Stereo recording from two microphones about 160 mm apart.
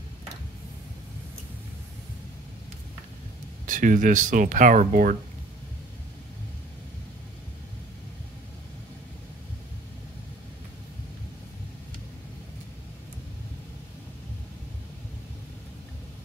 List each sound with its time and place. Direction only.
3.6 s speech: 55° right (ahead or behind)